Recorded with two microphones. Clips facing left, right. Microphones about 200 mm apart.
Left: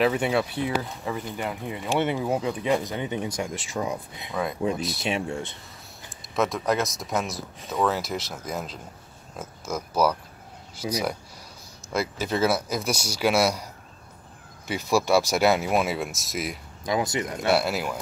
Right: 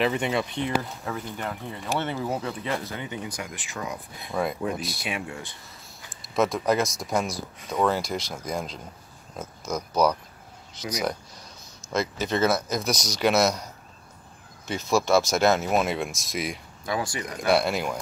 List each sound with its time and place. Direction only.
0.0 s speech: 5° left (ahead or behind); by 4.3 s 25° left (ahead or behind)
4.7 s speech: centre (ahead or behind)
5.0 s speech: 30° left (ahead or behind)
6.3 s speech: centre (ahead or behind)
11.9 s speech: 10° left (ahead or behind)
14.7 s speech: 10° left (ahead or behind)
16.8 s speech: 20° left (ahead or behind)
17.5 s speech: 5° left (ahead or behind)